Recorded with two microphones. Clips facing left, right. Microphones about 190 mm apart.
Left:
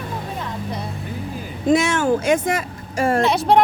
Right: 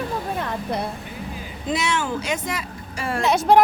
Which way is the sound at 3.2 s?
Centre (ahead or behind).